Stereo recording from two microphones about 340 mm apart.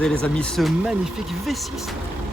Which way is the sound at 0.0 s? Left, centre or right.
Centre.